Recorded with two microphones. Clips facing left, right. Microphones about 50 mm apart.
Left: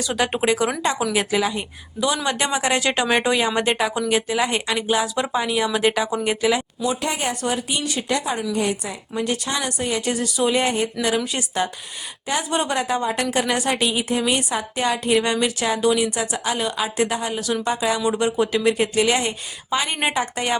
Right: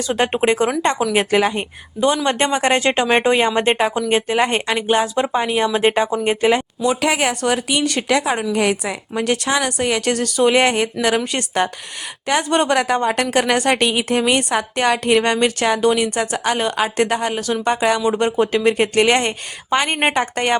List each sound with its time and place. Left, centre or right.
0.0 s speech: right
0.4 s a woman's voice: right
6.8 s speech: right
9.7 s a woman's voice: right
18.2 s a woman's voice: right